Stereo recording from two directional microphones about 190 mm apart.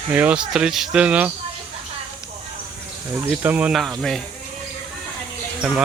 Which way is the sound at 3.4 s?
10° right (ahead or behind).